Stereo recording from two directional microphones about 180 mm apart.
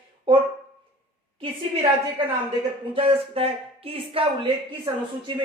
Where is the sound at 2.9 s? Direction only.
35° right (ahead or behind).